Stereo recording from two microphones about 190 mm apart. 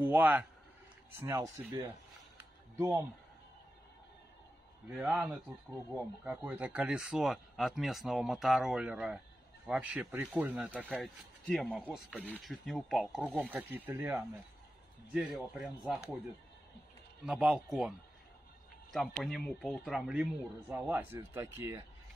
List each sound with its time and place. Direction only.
0.0 s speech: 10° right (ahead or behind)
4.8 s speech: 5° right (ahead or behind)
11.0 s speech: 5° left (ahead or behind)
17.3 s speech: 5° right (ahead or behind)